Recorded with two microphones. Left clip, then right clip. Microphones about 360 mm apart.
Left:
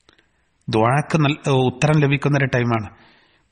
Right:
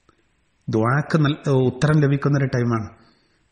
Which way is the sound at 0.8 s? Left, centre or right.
Centre.